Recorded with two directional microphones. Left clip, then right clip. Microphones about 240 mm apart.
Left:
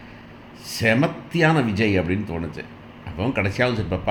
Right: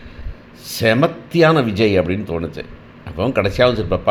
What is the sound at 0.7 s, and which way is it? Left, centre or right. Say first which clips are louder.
A man's voice: right 5 dB; right.